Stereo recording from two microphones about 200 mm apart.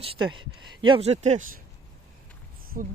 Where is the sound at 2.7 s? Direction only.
45° right (ahead or behind).